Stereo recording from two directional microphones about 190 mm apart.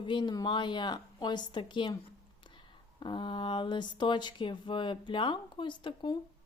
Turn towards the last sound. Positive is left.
turn(degrees=25)  # may be behind; listen again after turning